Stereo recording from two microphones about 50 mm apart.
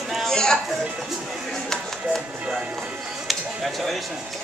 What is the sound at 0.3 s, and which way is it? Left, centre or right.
Music, centre.